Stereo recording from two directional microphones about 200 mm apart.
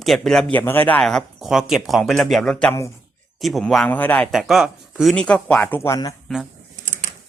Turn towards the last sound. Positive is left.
turn(degrees=-35)  # may be behind; listen again after turning